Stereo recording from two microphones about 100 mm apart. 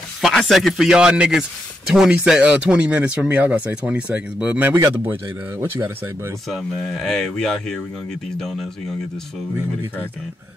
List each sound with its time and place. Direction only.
0.2 s speech: 5° left (ahead or behind); by 4.7 s 15° right (ahead or behind)
5.6 s speech: 25° right (ahead or behind)
6.5 s speech: centre (ahead or behind)